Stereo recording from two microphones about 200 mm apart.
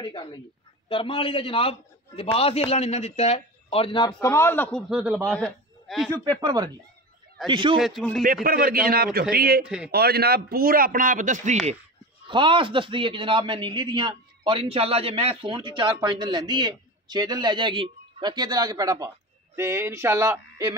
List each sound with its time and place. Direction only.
0.0 s a man's voice: 25° left (ahead or behind); by 5.3 s 5° right (ahead or behind)
5.3 s a sound: 5° left (ahead or behind)
6.4 s a man's voice: 20° right (ahead or behind)
7.8 s speech: centre (ahead or behind)
8.5 s a man's voice: 45° right (ahead or behind)
12.3 s a man's voice: 25° right (ahead or behind)